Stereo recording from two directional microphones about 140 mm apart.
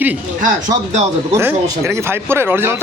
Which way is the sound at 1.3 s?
20° right (ahead or behind).